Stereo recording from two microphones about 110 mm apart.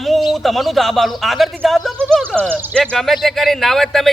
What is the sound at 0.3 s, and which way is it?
A man's voice, centre (ahead or behind).